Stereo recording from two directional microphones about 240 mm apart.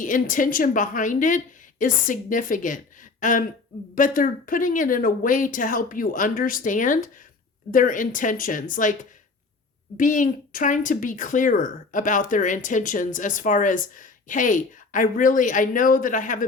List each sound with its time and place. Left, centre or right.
0.0 s speech: left